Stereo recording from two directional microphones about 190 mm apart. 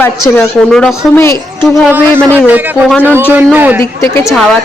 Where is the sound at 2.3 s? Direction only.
10° right (ahead or behind).